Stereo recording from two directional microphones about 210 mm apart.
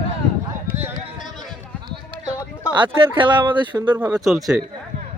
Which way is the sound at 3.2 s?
20° right (ahead or behind).